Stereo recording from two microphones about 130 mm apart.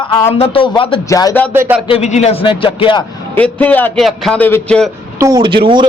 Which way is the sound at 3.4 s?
10° left (ahead or behind).